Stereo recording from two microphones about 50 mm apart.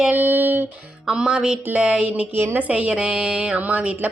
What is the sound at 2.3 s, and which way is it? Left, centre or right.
Speech, right.